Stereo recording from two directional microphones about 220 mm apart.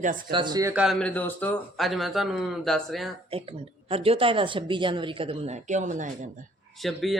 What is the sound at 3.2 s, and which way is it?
A woman's voice, 25° right (ahead or behind).